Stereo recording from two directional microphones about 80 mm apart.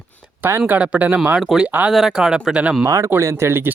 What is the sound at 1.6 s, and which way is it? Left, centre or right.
Speech, centre.